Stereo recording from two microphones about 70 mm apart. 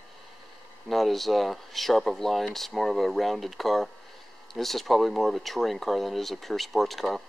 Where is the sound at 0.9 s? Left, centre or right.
Centre.